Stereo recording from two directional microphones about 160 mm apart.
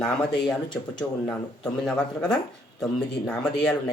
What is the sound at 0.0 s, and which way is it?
Speech, 5° left (ahead or behind).